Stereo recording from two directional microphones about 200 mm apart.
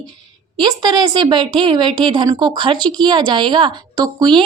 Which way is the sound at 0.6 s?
20° right (ahead or behind).